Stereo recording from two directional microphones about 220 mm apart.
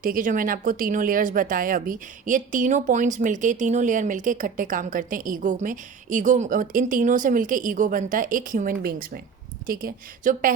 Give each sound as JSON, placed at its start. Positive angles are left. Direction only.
{"t": 0.0, "sound": "speech", "side_deg": -40}